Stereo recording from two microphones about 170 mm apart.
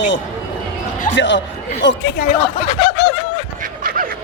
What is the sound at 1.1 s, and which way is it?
Speech, 90° left.